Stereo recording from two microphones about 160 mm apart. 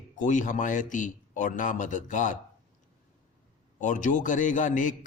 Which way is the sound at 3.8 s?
50° left (ahead or behind).